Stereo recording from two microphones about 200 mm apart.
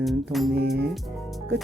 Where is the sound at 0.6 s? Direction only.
55° right (ahead or behind).